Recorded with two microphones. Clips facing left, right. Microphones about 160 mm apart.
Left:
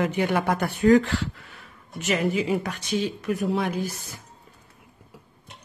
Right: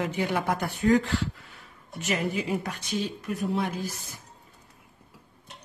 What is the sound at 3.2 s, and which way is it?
Speech, 90° left.